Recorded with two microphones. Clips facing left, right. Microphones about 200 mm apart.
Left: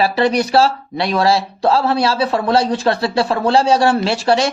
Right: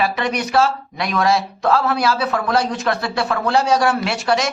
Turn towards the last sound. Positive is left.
turn(degrees=30)  # may be behind; listen again after turning